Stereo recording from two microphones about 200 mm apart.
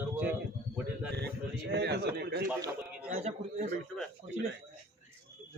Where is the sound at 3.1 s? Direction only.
35° right (ahead or behind).